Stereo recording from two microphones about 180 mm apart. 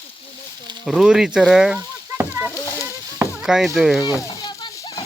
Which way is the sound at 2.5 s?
15° left (ahead or behind).